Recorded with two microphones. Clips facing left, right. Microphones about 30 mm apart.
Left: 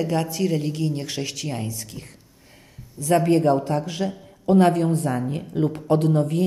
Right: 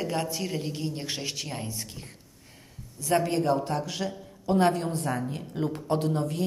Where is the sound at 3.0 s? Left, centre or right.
Left.